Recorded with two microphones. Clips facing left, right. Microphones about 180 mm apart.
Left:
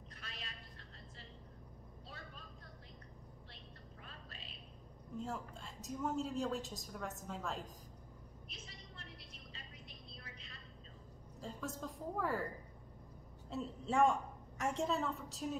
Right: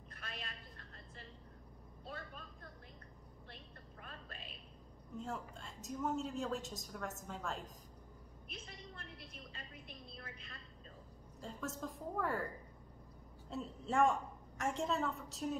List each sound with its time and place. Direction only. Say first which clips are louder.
0.1 s a sound: right 4 dB; 55° right (ahead or behind)
2.0 s vehicle: right 6 dB; 55° right (ahead or behind)
4.0 s whispering: right 4 dB; 55° right (ahead or behind)
5.1 s a woman's voice: left 1 dB; centre (ahead or behind)
8.5 s a sound: right 7 dB; 55° right (ahead or behind)
9.5 s vehicle: right 3 dB; 55° right (ahead or behind)
11.4 s a woman's voice: even; centre (ahead or behind)
13.5 s a woman's voice: left 1 dB; centre (ahead or behind)